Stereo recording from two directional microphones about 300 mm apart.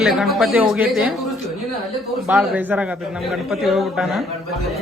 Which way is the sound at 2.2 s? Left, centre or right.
Centre.